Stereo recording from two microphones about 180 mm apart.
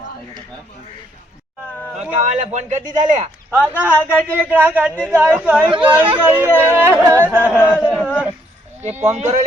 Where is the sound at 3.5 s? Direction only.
10° right (ahead or behind).